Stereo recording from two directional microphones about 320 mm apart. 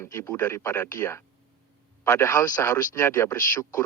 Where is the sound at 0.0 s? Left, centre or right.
Centre.